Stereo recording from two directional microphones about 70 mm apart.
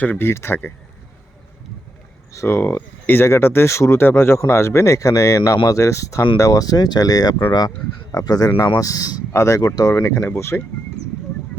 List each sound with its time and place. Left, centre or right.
0.0 s speech: left
2.3 s speech: left
2.6 s speech: left
9.3 s speech: left
10.0 s speech: left